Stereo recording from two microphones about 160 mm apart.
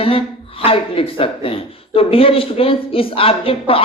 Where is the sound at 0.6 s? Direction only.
35° left (ahead or behind).